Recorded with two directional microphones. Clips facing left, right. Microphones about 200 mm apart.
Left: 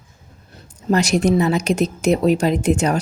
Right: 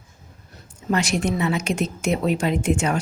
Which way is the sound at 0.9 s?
40° left (ahead or behind).